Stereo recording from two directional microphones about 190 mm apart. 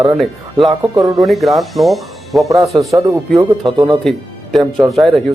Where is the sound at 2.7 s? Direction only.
15° right (ahead or behind).